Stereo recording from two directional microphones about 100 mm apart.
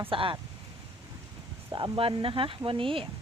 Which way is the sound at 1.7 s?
60° right (ahead or behind).